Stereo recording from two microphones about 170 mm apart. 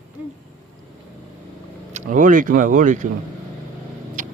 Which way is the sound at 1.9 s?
45° right (ahead or behind).